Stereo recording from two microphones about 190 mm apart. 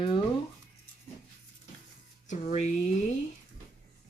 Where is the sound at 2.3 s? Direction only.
40° left (ahead or behind).